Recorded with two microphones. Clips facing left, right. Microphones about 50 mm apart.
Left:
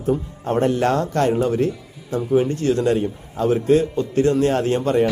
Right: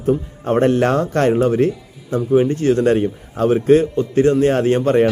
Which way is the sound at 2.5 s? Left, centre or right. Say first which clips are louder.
Right 4 dB; right.